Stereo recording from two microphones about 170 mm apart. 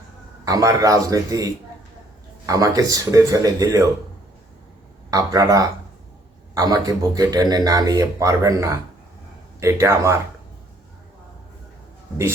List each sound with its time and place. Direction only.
0.4 s speech: 20° right (ahead or behind)
5.1 s speech: 20° right (ahead or behind)